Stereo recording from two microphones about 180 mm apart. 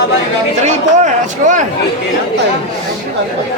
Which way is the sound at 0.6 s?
40° right (ahead or behind).